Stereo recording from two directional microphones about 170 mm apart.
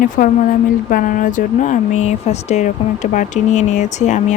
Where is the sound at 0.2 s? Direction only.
55° left (ahead or behind).